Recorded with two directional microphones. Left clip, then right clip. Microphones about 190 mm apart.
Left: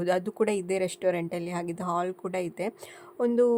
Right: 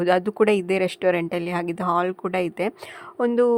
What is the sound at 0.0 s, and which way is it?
A woman's voice, 25° right (ahead or behind).